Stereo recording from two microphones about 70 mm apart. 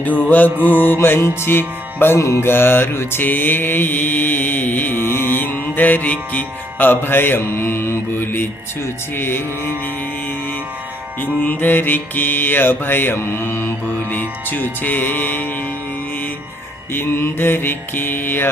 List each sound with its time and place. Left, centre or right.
0.0 s mantra: left
0.6 s music: left
2.2 s mantra: left
9.1 s music: left
11.2 s mantra: left
16.9 s music: left